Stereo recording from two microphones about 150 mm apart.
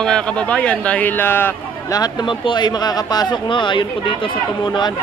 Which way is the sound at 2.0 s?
30° left (ahead or behind).